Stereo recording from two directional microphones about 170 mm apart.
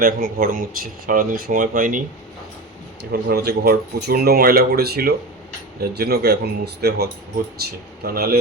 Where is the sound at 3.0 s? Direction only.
75° right (ahead or behind).